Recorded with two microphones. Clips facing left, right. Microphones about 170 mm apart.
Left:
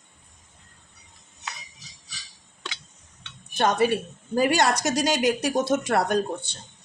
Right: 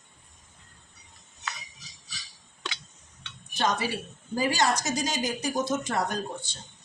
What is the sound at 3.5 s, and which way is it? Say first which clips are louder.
A woman's voice: left 7 dB; 60° left (ahead or behind).